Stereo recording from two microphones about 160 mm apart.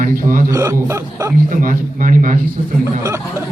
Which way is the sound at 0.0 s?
60° right (ahead or behind).